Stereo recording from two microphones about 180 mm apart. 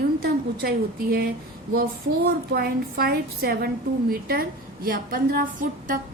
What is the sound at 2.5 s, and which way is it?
A woman's voice, 60° right (ahead or behind).